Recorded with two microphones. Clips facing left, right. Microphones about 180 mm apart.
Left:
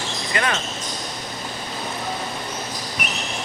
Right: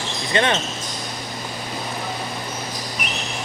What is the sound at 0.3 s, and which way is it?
Speech, 25° right (ahead or behind).